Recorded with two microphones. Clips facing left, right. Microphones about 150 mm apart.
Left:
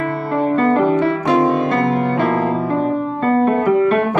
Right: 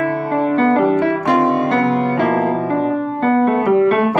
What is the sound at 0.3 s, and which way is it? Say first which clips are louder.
Music: even; 50° right (ahead or behind).